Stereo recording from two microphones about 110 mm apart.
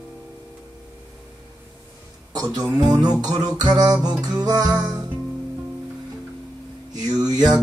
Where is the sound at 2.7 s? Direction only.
35° right (ahead or behind).